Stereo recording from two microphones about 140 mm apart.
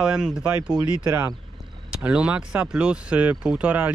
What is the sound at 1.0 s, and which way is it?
Speech, 15° right (ahead or behind).